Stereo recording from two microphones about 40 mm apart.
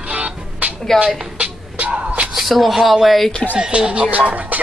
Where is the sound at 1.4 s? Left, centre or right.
Right.